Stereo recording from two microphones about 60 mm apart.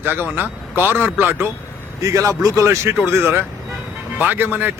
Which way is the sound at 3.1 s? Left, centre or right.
Right.